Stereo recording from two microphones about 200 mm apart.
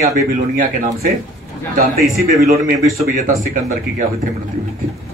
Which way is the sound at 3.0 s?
40° right (ahead or behind).